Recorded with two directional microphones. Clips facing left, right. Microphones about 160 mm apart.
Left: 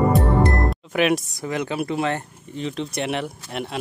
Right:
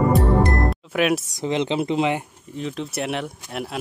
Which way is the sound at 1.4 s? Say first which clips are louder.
Right 3 dB; 20° right (ahead or behind).